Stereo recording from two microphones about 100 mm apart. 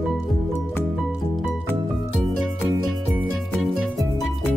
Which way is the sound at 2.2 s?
Centre (ahead or behind).